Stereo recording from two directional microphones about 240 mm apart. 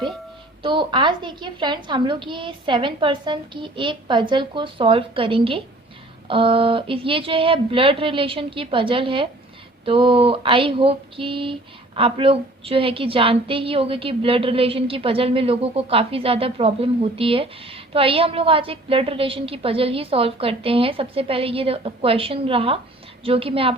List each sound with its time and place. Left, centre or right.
0.6 s a woman's voice: centre